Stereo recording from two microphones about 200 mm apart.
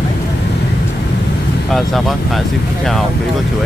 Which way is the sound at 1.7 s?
Centre (ahead or behind).